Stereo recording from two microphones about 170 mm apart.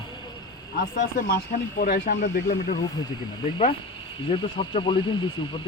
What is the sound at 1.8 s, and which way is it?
Speech, 60° left (ahead or behind).